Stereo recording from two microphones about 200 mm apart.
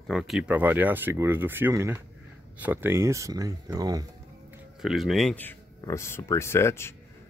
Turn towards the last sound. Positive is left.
turn(degrees=10)  # may be behind; listen again after turning